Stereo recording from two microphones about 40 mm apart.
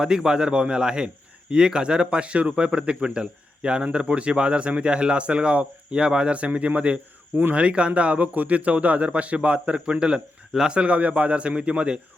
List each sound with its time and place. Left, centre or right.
0.0 s a man's voice: centre